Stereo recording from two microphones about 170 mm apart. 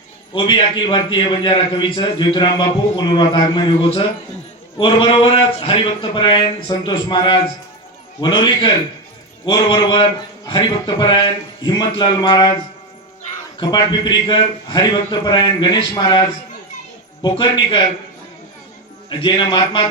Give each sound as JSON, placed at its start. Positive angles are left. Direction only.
{"t": 0.3, "sound": "a man's voice", "side_deg": 30}
{"t": 13.6, "sound": "a man's voice", "side_deg": 25}
{"t": 17.2, "sound": "a man's voice", "side_deg": 30}
{"t": 19.2, "sound": "a man's voice", "side_deg": 30}